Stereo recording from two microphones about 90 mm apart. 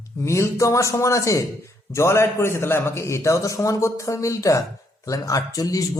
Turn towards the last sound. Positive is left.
turn(degrees=45)  # may be behind; listen again after turning